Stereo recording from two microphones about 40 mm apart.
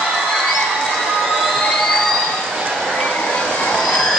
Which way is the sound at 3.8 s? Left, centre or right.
Centre.